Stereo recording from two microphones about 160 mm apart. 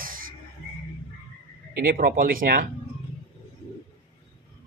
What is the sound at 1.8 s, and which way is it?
Speech, 65° right (ahead or behind).